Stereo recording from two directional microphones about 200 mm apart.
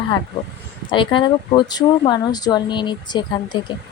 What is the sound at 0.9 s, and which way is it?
Speech, 25° left (ahead or behind).